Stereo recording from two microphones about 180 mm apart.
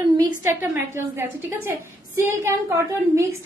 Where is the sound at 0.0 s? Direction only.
15° right (ahead or behind).